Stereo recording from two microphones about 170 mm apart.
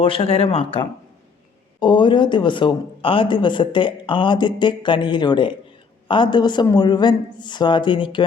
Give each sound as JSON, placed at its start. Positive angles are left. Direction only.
{"t": 0.0, "sound": "speech", "side_deg": 30}